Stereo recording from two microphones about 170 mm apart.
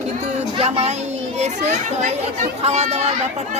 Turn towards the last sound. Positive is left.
turn(degrees=-40)  # may be behind; listen again after turning